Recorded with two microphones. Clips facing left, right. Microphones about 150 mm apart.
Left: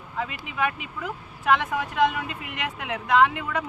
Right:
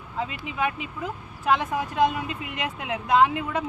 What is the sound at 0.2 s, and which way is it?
Speech, 30° right (ahead or behind).